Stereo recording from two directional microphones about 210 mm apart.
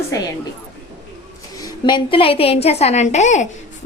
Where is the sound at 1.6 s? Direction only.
20° left (ahead or behind).